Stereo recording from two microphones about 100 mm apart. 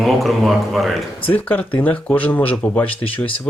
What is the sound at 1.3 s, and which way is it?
Speech, 15° left (ahead or behind).